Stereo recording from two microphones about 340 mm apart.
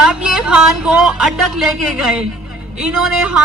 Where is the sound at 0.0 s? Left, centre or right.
Centre.